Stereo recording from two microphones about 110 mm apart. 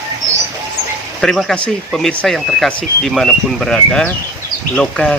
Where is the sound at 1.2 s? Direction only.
5° left (ahead or behind).